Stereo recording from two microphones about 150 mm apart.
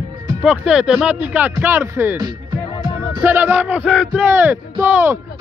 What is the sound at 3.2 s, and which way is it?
Speech, 10° right (ahead or behind).